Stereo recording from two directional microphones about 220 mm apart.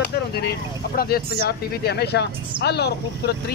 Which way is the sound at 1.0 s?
45° left (ahead or behind).